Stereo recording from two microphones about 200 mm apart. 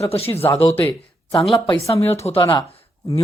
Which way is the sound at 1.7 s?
15° left (ahead or behind).